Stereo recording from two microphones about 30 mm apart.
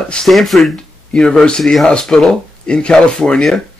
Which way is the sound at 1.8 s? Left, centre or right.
Left.